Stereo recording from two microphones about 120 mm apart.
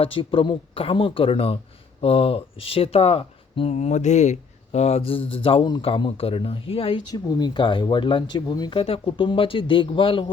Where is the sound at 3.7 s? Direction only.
70° left (ahead or behind); by 8.7 s 35° left (ahead or behind).